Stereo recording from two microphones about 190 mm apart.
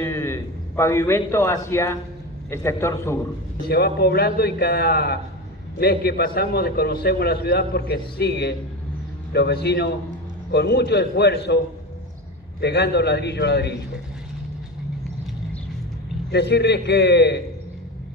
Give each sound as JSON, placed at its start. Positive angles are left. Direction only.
{"t": 0.0, "sound": "a man's voice", "side_deg": 15}
{"t": 3.6, "sound": "a man's voice", "side_deg": 55}
{"t": 16.3, "sound": "a man's voice", "side_deg": 60}